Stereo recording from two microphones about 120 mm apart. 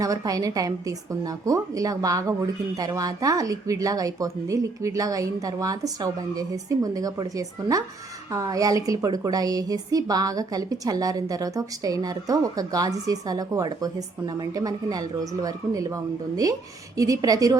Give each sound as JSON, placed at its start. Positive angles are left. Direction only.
{"t": 0.0, "sound": "a woman's voice", "side_deg": -30}